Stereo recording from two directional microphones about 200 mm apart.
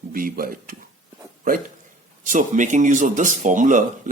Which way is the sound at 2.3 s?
40° right (ahead or behind).